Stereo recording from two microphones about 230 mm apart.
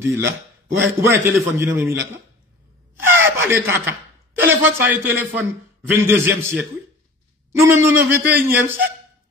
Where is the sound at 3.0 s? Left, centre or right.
Right.